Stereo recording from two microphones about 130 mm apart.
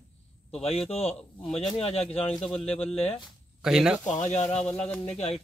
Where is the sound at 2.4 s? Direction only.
50° left (ahead or behind).